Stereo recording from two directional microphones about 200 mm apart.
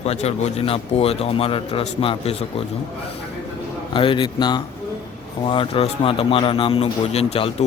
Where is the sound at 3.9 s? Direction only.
25° left (ahead or behind).